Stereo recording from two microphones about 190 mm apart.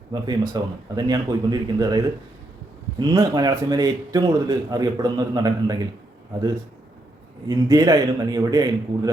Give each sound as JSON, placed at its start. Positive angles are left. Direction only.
{"t": 0.1, "sound": "a man's voice", "side_deg": -20}
{"t": 3.0, "sound": "a man's voice", "side_deg": -20}
{"t": 7.4, "sound": "a man's voice", "side_deg": -20}